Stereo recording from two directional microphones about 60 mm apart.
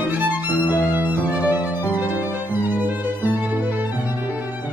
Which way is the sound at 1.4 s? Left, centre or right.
Right.